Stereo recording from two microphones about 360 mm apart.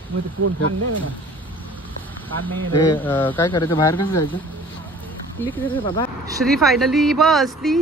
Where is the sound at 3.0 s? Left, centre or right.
Centre.